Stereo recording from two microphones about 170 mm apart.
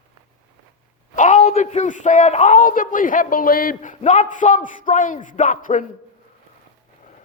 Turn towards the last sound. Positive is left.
turn(degrees=50)  # may be behind; listen again after turning